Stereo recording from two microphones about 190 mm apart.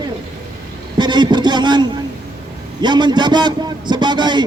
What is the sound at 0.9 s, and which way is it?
A man's voice, 25° right (ahead or behind).